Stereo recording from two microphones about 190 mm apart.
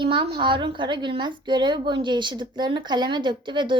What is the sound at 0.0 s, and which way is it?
A woman's voice, 25° right (ahead or behind).